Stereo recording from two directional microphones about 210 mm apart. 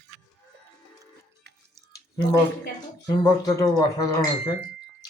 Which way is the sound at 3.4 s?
20° left (ahead or behind).